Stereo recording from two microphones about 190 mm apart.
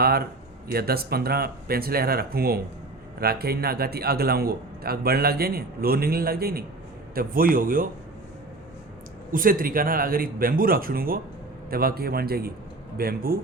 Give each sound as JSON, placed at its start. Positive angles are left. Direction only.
{"t": 0.0, "sound": "a man's voice", "side_deg": -55}
{"t": 9.3, "sound": "a man's voice", "side_deg": -45}